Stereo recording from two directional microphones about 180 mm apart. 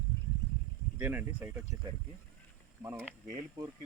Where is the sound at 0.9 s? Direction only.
10° right (ahead or behind).